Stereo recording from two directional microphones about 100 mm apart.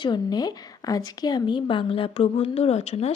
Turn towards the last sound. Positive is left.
turn(degrees=90)